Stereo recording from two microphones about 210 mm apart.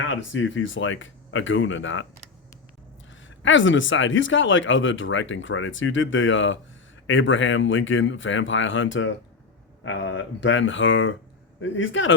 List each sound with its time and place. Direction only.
0.1 s speech: 65° left (ahead or behind)
3.2 s speech: 65° left (ahead or behind)